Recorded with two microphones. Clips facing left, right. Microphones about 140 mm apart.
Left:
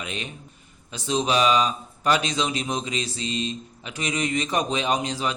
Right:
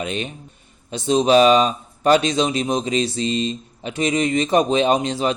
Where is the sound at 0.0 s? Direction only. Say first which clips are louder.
Right 8 dB; 30° right (ahead or behind).